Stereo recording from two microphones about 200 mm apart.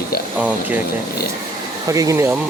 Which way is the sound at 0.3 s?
5° right (ahead or behind).